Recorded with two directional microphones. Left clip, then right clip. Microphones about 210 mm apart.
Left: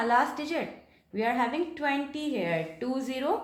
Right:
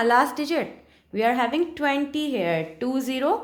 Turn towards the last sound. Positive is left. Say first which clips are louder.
# right 6 dB
turn(degrees=-50)  # may be behind; listen again after turning